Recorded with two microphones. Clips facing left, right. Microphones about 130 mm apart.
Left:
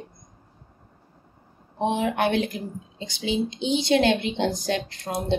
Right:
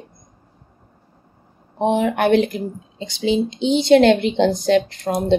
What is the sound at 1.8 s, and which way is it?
A woman's voice, 55° right (ahead or behind).